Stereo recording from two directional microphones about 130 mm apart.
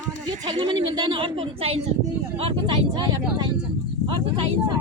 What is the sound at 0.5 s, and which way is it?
A woman's voice, 40° right (ahead or behind).